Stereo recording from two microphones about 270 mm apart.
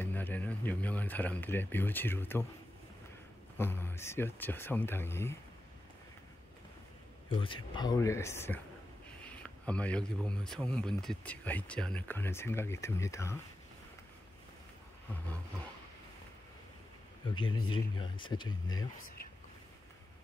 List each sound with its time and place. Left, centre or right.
0.0 s speech: centre
3.5 s speech: centre
7.2 s speech: centre
17.3 s speech: centre